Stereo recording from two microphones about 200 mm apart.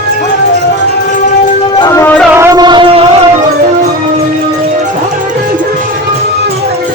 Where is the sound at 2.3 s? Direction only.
15° right (ahead or behind).